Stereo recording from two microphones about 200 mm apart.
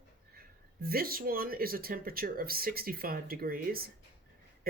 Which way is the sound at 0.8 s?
50° right (ahead or behind).